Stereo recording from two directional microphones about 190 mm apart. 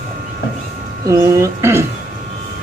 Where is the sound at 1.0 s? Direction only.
15° right (ahead or behind).